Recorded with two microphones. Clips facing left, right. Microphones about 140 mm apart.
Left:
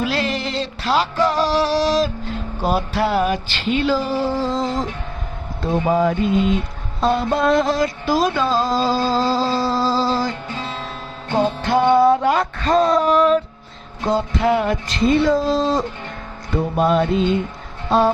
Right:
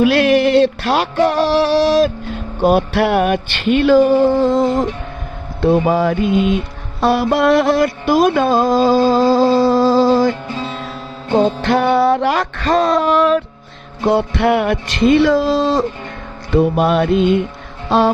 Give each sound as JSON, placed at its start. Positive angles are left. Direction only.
{"t": 0.0, "sound": "music", "side_deg": -65}
{"t": 5.6, "sound": "music", "side_deg": -80}
{"t": 11.6, "sound": "music", "side_deg": -75}
{"t": 17.8, "sound": "music", "side_deg": -90}